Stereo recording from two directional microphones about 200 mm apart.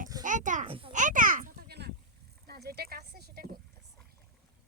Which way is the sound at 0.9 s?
40° right (ahead or behind).